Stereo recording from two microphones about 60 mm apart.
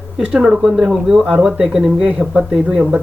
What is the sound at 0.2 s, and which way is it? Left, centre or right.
Speech, centre.